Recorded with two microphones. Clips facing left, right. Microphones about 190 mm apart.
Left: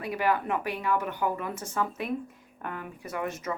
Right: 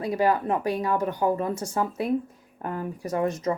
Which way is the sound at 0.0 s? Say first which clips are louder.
Right 4 dB; 35° right (ahead or behind).